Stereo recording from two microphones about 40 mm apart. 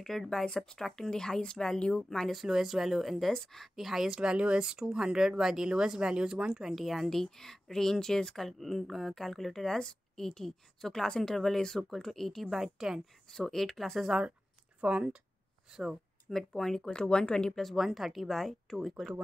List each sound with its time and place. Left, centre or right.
0.0 s speech: centre; by 2.0 s left
2.0 s speech: centre
2.3 s speech: centre
3.7 s speech: centre
4.2 s speech: right
6.7 s speech: centre
7.1 s speech: centre
12.4 s speech: centre
13.3 s speech: centre
14.0 s speech: centre
14.8 s speech: right
15.7 s speech: centre
16.3 s speech: centre
17.7 s speech: centre